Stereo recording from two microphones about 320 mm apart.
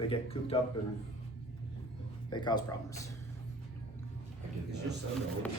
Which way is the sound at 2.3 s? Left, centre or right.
Centre.